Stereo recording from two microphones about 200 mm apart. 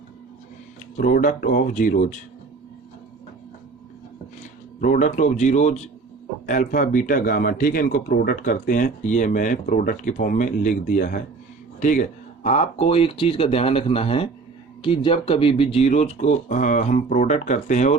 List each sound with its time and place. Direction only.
0.9 s speech: 45° left (ahead or behind)
4.8 s speech: 40° left (ahead or behind)